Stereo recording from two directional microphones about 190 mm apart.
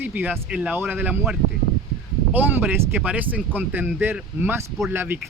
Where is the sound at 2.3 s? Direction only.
10° right (ahead or behind).